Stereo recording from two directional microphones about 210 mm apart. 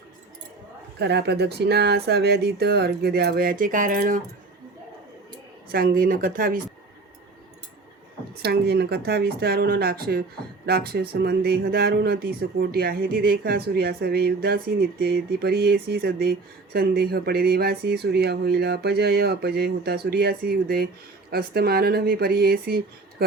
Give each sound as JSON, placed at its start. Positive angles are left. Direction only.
{"t": 0.9, "sound": "speech", "side_deg": -50}
{"t": 5.7, "sound": "speech", "side_deg": -45}
{"t": 8.4, "sound": "speech", "side_deg": -50}